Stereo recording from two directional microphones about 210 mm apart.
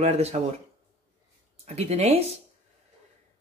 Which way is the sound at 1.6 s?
30° right (ahead or behind).